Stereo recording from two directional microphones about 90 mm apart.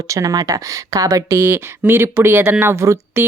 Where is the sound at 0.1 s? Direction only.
40° right (ahead or behind).